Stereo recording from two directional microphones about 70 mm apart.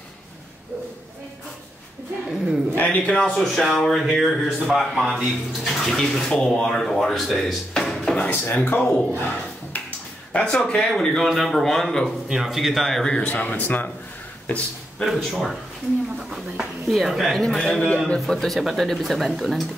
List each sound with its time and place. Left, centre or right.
2.7 s a man's voice: left; by 7.5 s centre
7.7 s a sound: centre
8.2 s speech: left; by 13.5 s centre
13.5 s speech: left
15.0 s speech: centre